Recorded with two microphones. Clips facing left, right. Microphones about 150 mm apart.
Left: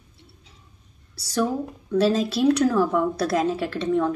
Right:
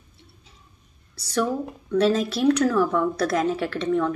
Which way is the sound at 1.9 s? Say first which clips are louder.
Even; 25° left (ahead or behind).